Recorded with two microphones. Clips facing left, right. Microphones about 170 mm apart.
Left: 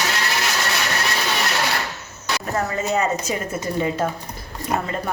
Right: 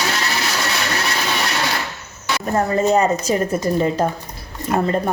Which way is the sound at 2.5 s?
35° right (ahead or behind).